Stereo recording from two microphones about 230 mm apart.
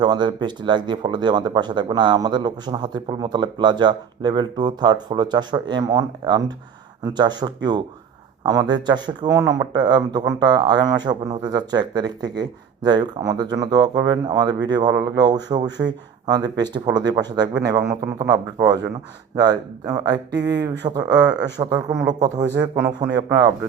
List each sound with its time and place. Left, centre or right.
0.0 s speech: centre
20.4 s speech: right
20.8 s speech: centre